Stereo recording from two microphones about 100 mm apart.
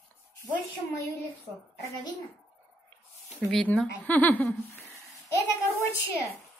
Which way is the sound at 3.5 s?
10° left (ahead or behind).